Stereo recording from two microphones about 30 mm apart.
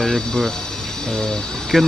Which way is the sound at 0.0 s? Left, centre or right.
Centre.